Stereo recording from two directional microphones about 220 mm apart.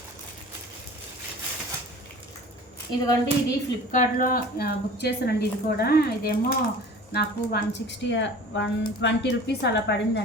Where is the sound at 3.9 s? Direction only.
35° left (ahead or behind).